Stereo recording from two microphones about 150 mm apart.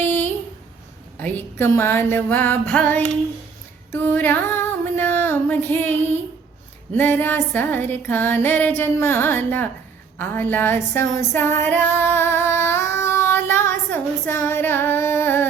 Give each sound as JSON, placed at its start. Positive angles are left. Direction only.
{"t": 0.0, "sound": "a sound", "side_deg": 15}
{"t": 1.2, "sound": "music", "side_deg": 10}
{"t": 3.9, "sound": "female singing", "side_deg": 15}
{"t": 6.9, "sound": "music", "side_deg": 15}
{"t": 10.2, "sound": "female singing", "side_deg": 10}